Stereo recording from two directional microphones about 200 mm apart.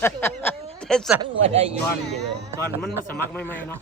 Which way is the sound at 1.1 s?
30° right (ahead or behind).